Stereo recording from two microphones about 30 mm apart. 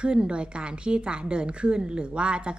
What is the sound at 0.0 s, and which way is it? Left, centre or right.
A woman's voice, right.